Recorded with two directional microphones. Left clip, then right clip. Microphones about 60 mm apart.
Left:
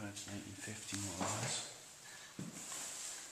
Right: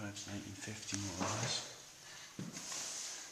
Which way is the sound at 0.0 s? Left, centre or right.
Centre.